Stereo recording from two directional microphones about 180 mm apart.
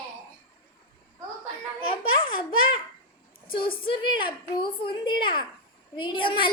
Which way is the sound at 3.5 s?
30° left (ahead or behind).